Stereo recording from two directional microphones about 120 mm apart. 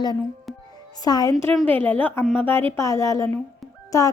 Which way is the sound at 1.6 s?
15° left (ahead or behind).